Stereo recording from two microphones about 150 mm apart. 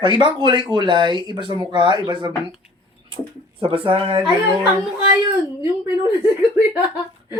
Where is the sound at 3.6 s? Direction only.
35° right (ahead or behind).